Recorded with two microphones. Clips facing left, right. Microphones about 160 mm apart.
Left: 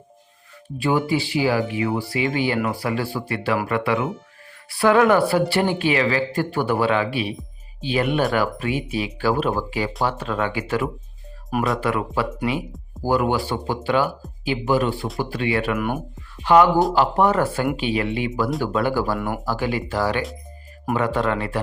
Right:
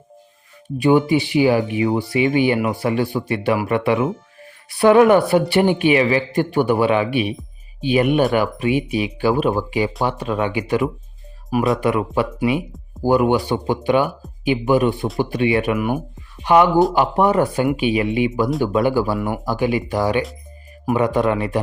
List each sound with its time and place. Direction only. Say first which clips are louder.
0.8 s speech: right 6 dB; 20° right (ahead or behind)
11.5 s speech: right 4 dB; centre (ahead or behind)
11.8 s speech: right 4 dB; 20° right (ahead or behind)